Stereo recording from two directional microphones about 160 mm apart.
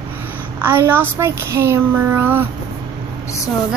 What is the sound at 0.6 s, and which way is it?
A woman's voice, 15° right (ahead or behind).